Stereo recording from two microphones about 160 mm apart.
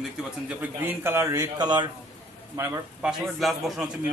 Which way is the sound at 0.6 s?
15° right (ahead or behind).